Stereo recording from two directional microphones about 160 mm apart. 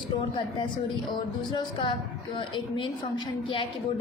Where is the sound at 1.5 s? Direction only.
30° left (ahead or behind).